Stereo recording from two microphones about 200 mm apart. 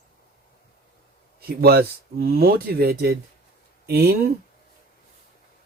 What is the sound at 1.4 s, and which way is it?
Speech, 50° right (ahead or behind).